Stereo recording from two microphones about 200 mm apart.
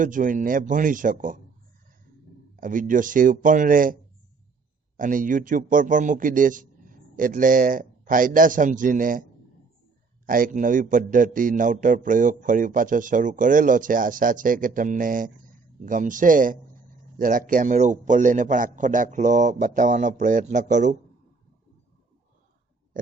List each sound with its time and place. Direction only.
0.0 s a man's voice: 40° right (ahead or behind)
2.6 s a man's voice: 40° right (ahead or behind)
4.9 s a man's voice: 40° right (ahead or behind)
10.2 s a man's voice: 45° right (ahead or behind)